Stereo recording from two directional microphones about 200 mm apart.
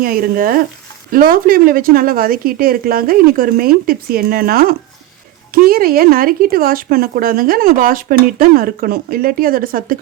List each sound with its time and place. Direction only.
0.0 s speech: 45° right (ahead or behind)